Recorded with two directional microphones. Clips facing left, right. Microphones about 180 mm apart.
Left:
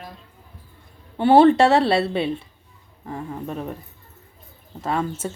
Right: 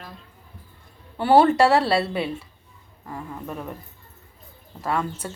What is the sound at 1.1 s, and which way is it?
A woman's voice, 25° left (ahead or behind).